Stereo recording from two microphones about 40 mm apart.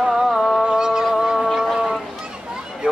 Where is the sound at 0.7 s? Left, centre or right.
Centre.